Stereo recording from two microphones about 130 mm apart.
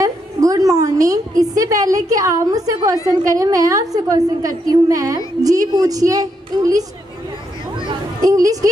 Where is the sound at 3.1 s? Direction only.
25° right (ahead or behind).